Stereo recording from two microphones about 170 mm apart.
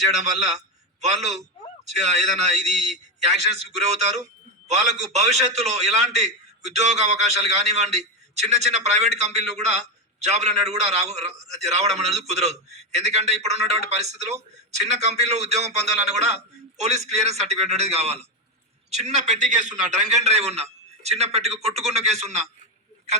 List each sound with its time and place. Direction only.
0.1 s a man's voice: 40° right (ahead or behind)